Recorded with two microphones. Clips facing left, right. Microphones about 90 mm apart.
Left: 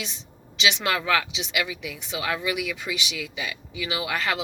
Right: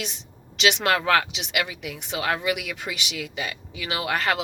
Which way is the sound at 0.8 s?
45° right (ahead or behind).